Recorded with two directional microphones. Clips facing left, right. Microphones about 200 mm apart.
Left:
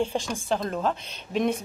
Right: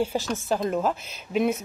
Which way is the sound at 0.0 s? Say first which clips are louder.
Right 1 dB; 5° right (ahead or behind).